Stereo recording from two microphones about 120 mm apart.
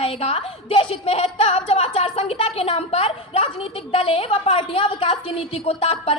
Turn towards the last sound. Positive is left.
turn(degrees=55)  # may be behind; listen again after turning